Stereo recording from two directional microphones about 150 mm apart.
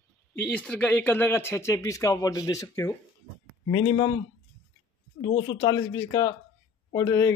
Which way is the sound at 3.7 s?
35° left (ahead or behind).